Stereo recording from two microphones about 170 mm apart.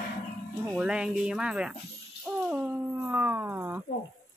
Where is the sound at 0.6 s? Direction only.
5° right (ahead or behind).